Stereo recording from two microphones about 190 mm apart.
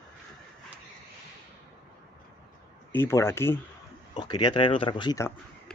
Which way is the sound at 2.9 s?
15° left (ahead or behind).